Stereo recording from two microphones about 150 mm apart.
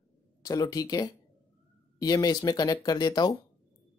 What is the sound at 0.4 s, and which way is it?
Speech, 25° left (ahead or behind).